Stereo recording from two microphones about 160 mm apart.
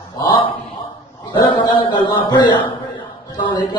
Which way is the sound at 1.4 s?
30° left (ahead or behind).